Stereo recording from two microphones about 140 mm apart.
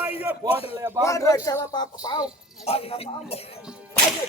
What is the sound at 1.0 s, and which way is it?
A man's voice, 25° left (ahead or behind).